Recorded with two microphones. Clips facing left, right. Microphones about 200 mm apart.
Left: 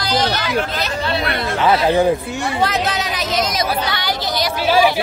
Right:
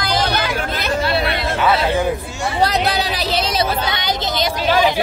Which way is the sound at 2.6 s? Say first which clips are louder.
Right 3 dB; 35° right (ahead or behind).